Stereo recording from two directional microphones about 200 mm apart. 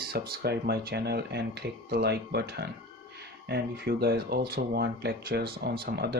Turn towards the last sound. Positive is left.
turn(degrees=-50)  # may be behind; listen again after turning